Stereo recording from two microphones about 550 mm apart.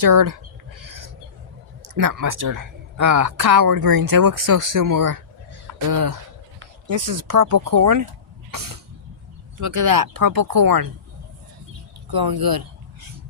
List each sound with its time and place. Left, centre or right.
0.0 s speech: right
0.8 s a sound: right
1.8 s speech: right
8.4 s cough: right
9.6 s speech: right
12.1 s speech: right